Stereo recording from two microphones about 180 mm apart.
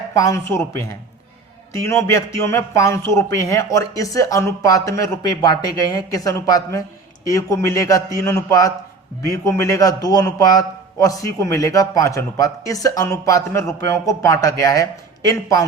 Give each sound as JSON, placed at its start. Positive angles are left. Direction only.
{"t": 0.2, "sound": "a man's voice", "side_deg": 15}
{"t": 1.7, "sound": "a man's voice", "side_deg": 15}